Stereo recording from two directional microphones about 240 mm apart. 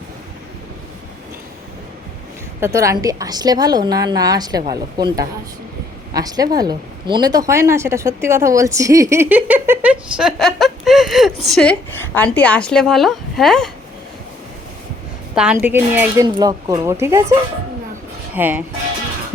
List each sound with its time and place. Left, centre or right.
2.6 s a woman's voice: centre
15.4 s a woman's voice: centre
18.3 s a woman's voice: centre